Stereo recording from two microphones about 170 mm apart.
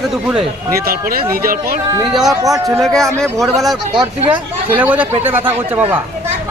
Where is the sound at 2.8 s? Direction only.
5° left (ahead or behind).